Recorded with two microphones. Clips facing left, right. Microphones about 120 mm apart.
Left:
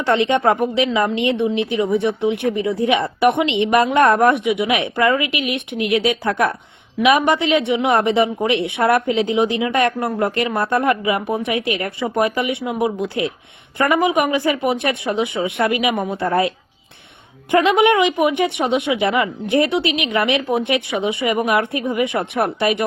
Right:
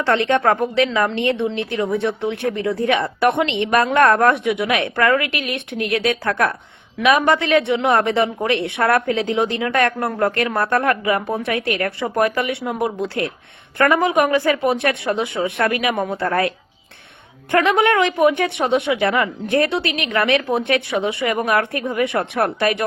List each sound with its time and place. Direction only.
0.0 s speech: 15° left (ahead or behind)
17.5 s speech: 15° left (ahead or behind)